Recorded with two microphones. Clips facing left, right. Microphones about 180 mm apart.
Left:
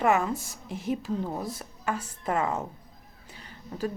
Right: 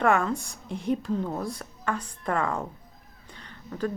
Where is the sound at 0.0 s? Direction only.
5° left (ahead or behind).